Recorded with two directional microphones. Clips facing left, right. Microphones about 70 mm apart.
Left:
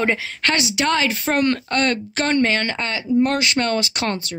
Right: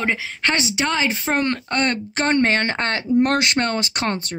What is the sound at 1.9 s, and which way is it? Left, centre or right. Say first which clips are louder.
Speech: even; right.